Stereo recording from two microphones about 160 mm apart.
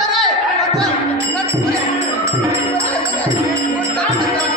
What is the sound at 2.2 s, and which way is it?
Music, 20° right (ahead or behind).